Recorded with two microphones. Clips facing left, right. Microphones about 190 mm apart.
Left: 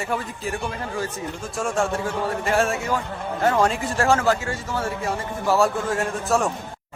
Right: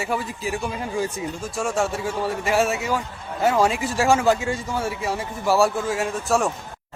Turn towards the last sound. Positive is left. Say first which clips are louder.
# even
turn(degrees=0)  # may be behind; listen again after turning